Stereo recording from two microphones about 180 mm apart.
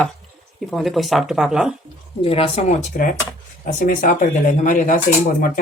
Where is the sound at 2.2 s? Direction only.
35° left (ahead or behind).